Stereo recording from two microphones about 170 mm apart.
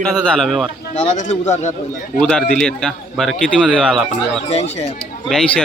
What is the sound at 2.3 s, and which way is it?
A man's voice, 5° left (ahead or behind).